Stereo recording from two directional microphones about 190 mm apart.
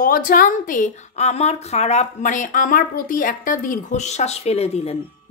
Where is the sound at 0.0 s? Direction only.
45° left (ahead or behind).